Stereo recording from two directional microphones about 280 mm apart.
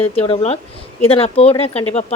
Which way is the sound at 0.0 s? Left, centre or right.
Left.